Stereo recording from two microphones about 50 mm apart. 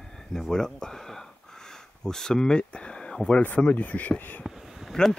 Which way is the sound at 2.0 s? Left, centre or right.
Centre.